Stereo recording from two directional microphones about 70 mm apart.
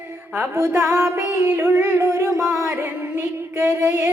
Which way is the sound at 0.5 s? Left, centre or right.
Right.